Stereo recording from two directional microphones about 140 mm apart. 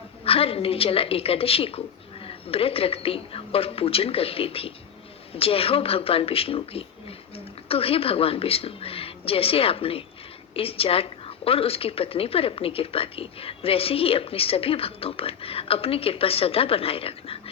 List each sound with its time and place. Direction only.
0.3 s a woman's voice: 45° left (ahead or behind)